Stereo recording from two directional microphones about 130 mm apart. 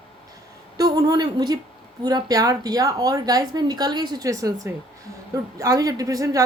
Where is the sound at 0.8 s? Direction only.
30° right (ahead or behind).